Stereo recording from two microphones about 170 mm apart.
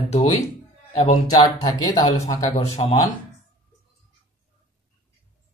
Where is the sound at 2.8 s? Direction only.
40° left (ahead or behind).